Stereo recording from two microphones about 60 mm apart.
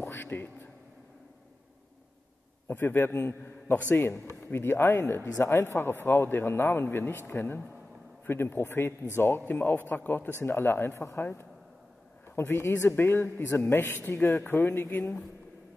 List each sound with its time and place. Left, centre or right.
0.0 s a sound: left
2.7 s a man's voice: left
12.4 s speech: left
14.1 s a man's voice: left